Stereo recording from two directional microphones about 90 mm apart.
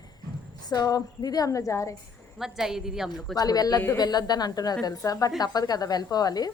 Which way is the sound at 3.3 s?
45° left (ahead or behind).